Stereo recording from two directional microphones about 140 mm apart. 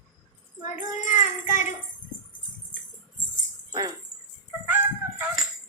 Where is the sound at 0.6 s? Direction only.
65° left (ahead or behind).